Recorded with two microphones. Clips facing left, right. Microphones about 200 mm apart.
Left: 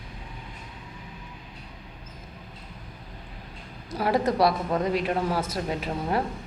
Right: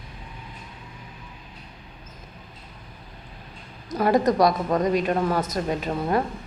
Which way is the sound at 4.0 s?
5° left (ahead or behind).